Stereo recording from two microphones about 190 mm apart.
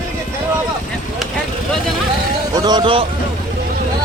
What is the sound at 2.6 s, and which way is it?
Speech, 20° right (ahead or behind).